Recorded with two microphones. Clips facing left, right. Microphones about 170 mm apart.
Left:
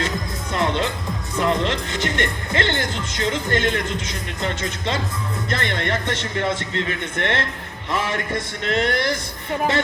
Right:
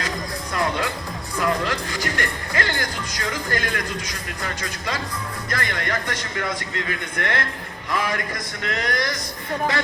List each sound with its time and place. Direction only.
0.5 s music: 25° left (ahead or behind)
1.4 s speech: 25° left (ahead or behind)